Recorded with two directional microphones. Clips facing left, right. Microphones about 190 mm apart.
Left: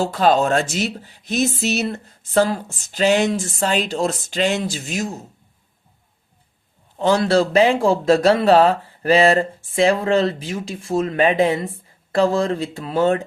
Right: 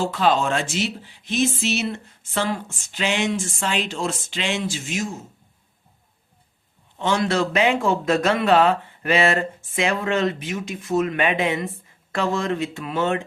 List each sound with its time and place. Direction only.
0.0 s speech: 40° left (ahead or behind)
7.0 s speech: 35° left (ahead or behind)